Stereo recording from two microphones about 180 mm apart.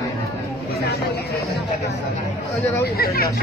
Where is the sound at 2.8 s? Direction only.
60° left (ahead or behind).